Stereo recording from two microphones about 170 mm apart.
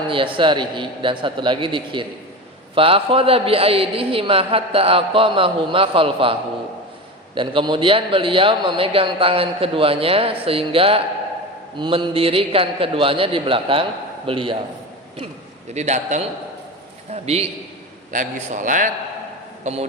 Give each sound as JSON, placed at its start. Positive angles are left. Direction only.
{"t": 0.1, "sound": "a man's voice", "side_deg": -30}
{"t": 7.3, "sound": "a man's voice", "side_deg": -30}
{"t": 15.7, "sound": "a man's voice", "side_deg": -40}
{"t": 18.1, "sound": "a man's voice", "side_deg": -50}